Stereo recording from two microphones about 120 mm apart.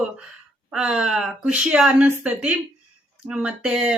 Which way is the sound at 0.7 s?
5° right (ahead or behind).